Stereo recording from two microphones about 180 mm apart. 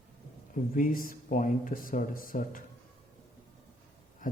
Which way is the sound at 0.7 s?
50° left (ahead or behind).